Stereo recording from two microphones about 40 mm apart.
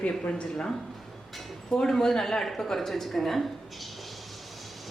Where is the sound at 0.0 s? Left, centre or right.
Left.